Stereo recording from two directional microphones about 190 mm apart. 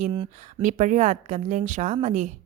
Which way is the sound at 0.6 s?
40° right (ahead or behind).